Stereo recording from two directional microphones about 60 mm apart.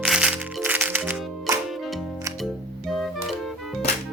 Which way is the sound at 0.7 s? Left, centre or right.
Right.